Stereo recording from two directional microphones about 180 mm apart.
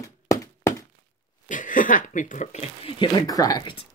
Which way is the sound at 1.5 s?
45° left (ahead or behind).